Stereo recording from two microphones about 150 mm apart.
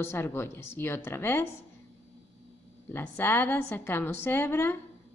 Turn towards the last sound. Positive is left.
turn(degrees=15)  # may be behind; listen again after turning